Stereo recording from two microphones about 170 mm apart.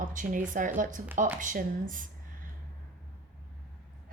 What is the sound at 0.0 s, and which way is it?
Speech, 50° right (ahead or behind).